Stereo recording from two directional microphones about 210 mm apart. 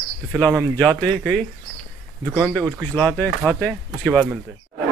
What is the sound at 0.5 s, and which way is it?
Speech, 15° right (ahead or behind).